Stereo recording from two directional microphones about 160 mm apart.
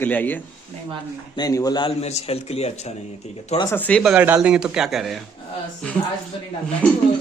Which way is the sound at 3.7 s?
10° left (ahead or behind).